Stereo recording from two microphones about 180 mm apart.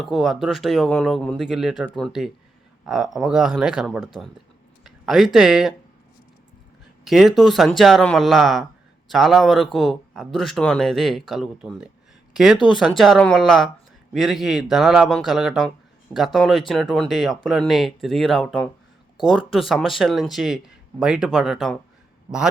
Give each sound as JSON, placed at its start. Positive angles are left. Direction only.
{"t": 0.0, "sound": "speech", "side_deg": 0}
{"t": 7.0, "sound": "speech", "side_deg": 0}